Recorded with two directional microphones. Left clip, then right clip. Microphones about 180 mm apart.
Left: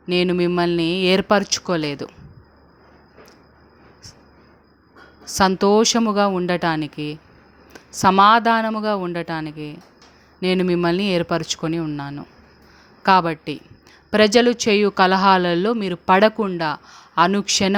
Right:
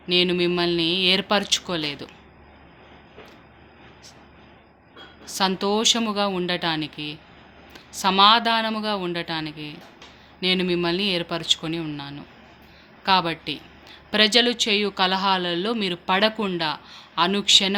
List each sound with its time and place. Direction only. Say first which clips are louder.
0.1 s speech: left 1 dB; 40° left (ahead or behind)
5.3 s speech: left 7 dB; 45° left (ahead or behind)